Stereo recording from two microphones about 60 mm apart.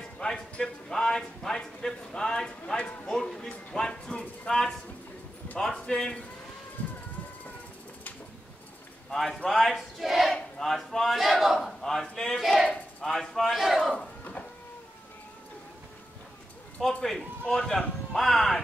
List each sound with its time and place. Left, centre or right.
0.2 s speech: centre
9.1 s speech: centre
16.8 s speech: centre